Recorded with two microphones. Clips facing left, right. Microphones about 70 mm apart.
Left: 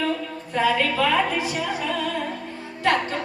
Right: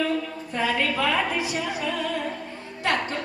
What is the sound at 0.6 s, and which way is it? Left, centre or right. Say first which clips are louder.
Speech: left 3 dB; centre.